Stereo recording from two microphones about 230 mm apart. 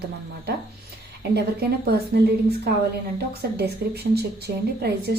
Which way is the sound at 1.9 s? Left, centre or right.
Right.